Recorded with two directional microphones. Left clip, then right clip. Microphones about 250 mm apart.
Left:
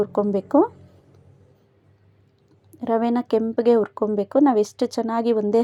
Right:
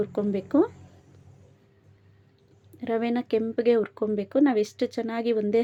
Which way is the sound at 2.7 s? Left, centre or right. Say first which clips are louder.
Left 6 dB; centre.